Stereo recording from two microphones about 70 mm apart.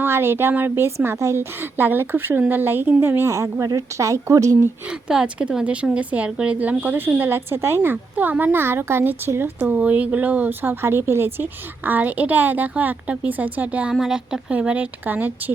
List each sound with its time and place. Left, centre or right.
0.0 s speech: right
0.9 s a woman's voice: right
4.9 s a woman's voice: centre; by 11.4 s right
11.9 s a woman's voice: right
13.9 s speech: centre
14.5 s a woman's voice: centre